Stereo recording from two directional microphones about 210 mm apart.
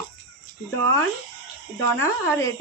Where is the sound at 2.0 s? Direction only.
15° left (ahead or behind).